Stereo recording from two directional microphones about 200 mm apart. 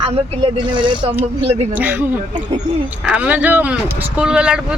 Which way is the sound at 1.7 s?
10° right (ahead or behind).